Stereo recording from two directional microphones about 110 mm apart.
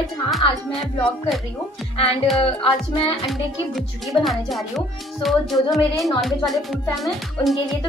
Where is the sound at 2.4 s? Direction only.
60° left (ahead or behind).